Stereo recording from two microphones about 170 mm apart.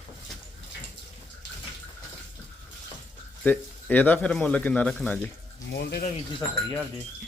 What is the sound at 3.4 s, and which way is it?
Speech, 10° left (ahead or behind).